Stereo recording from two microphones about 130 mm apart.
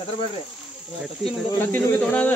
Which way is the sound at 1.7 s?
15° left (ahead or behind).